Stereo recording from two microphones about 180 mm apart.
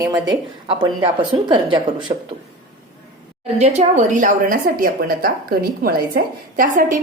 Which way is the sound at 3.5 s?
40° right (ahead or behind).